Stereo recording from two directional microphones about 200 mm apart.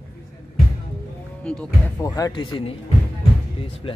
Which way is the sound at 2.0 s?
15° left (ahead or behind).